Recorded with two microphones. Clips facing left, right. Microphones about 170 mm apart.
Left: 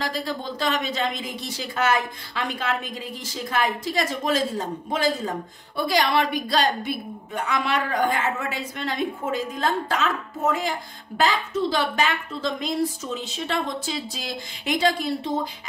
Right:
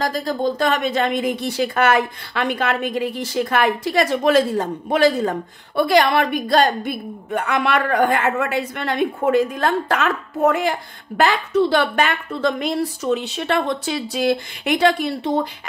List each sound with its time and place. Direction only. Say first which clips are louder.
0.0 s a woman's voice: right 7 dB; 45° right (ahead or behind); by 15.4 s 65° right (ahead or behind)